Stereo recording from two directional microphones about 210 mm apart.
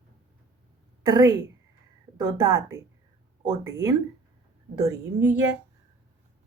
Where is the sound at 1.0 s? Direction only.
15° right (ahead or behind).